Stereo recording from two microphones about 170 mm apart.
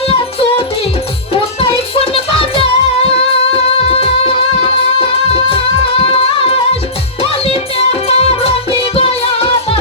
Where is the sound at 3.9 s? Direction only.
35° left (ahead or behind).